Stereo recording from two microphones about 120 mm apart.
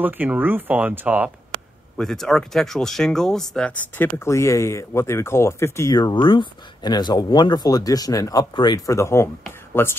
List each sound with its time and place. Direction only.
0.0 s speech: 15° right (ahead or behind)
2.0 s speech: 5° left (ahead or behind); by 5.9 s 20° left (ahead or behind)
5.9 s speech: 40° left (ahead or behind); by 9.9 s 20° left (ahead or behind)